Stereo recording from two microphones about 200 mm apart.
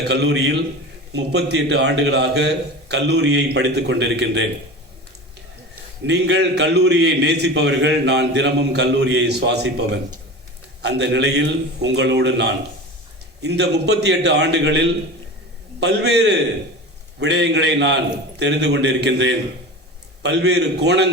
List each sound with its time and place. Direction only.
0.0 s a man's voice: 60° right (ahead or behind)
6.1 s a man's voice: 60° right (ahead or behind)